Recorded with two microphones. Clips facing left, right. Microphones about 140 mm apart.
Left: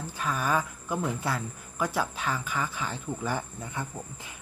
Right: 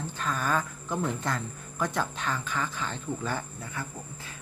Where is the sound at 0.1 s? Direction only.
10° left (ahead or behind).